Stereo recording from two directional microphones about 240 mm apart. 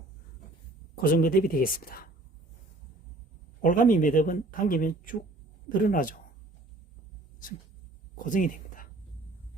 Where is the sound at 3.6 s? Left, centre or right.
Left.